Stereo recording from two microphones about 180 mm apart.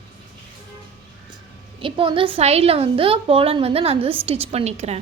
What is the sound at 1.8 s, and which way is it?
A woman's voice, 30° right (ahead or behind).